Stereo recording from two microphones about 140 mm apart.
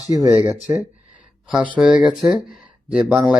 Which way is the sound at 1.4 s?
10° right (ahead or behind).